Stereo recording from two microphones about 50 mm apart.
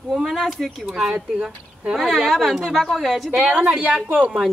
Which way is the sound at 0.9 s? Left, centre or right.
Centre.